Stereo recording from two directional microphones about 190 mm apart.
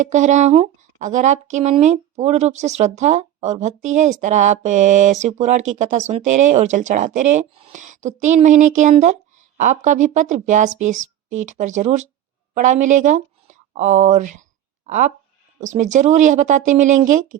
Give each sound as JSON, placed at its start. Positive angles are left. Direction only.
{"t": 0.0, "sound": "speech", "side_deg": -40}